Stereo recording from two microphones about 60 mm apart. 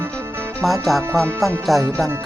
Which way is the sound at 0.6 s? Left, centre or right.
Centre.